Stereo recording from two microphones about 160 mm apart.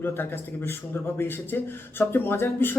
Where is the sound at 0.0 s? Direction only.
15° left (ahead or behind).